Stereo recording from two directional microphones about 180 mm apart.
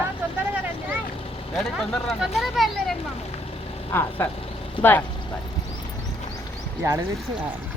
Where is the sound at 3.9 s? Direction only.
10° left (ahead or behind).